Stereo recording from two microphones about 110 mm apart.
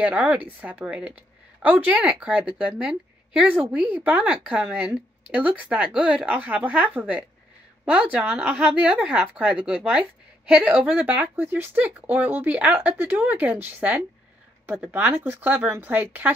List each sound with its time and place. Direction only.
0.0 s speech: 10° right (ahead or behind)